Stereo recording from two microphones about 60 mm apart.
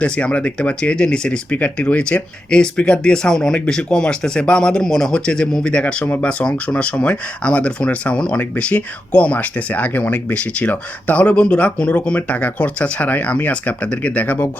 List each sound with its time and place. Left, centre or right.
0.0 s speech: centre